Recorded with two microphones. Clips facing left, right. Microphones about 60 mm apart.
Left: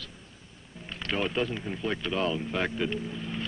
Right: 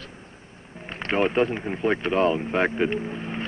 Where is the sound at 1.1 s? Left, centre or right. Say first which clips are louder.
Right 7 dB; right.